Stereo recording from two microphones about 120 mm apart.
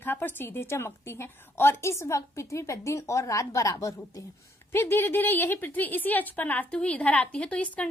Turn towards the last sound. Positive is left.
turn(degrees=10)  # may be behind; listen again after turning